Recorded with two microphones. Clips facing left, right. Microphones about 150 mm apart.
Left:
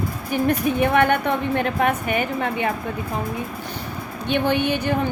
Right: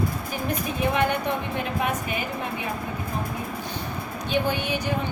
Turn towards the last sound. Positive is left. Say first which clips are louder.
# left 6 dB
turn(degrees=55)  # may be behind; listen again after turning